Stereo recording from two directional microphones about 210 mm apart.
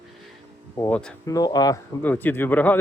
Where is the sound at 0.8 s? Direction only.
5° left (ahead or behind).